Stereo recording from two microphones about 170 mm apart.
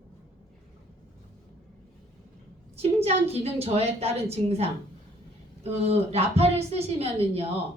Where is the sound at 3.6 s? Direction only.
35° right (ahead or behind).